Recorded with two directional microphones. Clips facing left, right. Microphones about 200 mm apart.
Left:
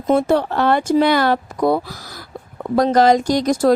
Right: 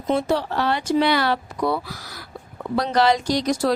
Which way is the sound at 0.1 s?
55° left (ahead or behind).